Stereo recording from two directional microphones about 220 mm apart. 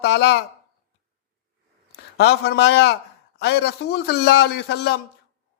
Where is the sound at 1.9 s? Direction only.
50° left (ahead or behind).